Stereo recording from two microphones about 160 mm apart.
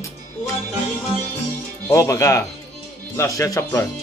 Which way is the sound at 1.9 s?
20° left (ahead or behind).